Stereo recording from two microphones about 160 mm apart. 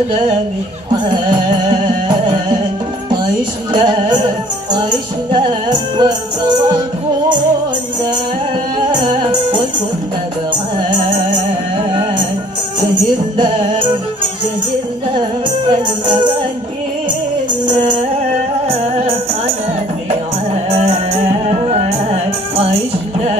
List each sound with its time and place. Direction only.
3.7 s music: 30° right (ahead or behind)
5.3 s music: 25° right (ahead or behind)
9.0 s music: 30° right (ahead or behind)
18.7 s music: 40° right (ahead or behind)
20.8 s music: 40° right (ahead or behind)